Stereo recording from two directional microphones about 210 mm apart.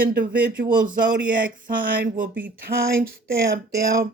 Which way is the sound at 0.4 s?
45° right (ahead or behind).